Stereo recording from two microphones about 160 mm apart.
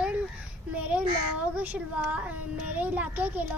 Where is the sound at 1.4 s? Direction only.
10° right (ahead or behind).